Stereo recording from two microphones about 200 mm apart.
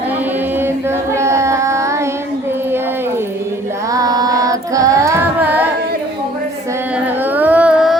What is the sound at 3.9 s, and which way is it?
Child singing, 20° right (ahead or behind).